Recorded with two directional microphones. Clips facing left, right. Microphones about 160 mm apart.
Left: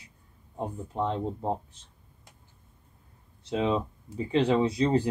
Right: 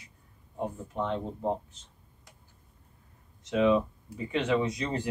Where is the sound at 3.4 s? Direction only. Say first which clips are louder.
Right 3 dB; 30° left (ahead or behind).